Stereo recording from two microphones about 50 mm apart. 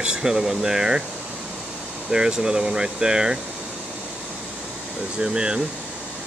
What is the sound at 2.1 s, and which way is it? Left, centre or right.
Speech, centre.